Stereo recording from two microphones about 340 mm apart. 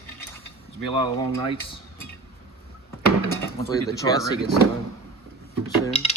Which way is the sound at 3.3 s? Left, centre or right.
Centre.